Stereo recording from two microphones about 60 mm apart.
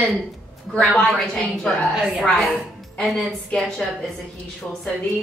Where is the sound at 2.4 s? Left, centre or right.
Centre.